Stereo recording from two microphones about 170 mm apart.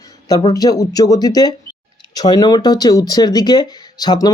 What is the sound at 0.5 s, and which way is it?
Speech, 20° left (ahead or behind).